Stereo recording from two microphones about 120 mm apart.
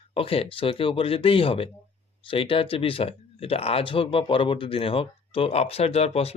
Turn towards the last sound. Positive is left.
turn(degrees=60)  # may be behind; listen again after turning